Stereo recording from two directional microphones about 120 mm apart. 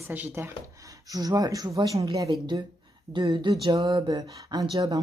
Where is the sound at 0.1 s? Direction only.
20° right (ahead or behind).